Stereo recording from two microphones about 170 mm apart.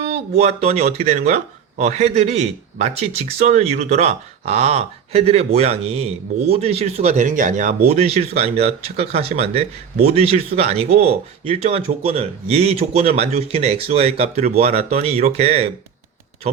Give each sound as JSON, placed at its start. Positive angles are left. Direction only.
{"t": 0.1, "sound": "a man's voice", "side_deg": -40}